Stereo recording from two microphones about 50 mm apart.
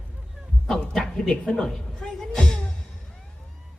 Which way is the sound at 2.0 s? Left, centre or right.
Centre.